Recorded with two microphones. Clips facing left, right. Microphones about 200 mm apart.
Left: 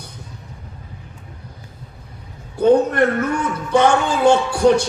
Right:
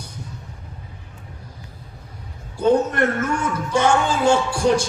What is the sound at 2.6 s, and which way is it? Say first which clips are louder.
Speech: left 4 dB; 60° left (ahead or behind).